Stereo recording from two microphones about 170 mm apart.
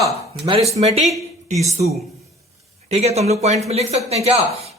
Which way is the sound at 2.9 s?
40° right (ahead or behind).